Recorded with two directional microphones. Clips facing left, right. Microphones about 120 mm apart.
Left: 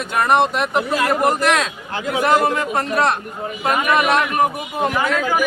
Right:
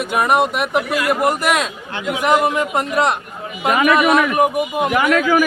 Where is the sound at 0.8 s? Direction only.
30° left (ahead or behind).